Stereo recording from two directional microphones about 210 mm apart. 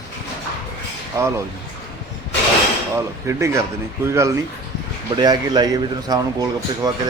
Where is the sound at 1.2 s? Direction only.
15° right (ahead or behind).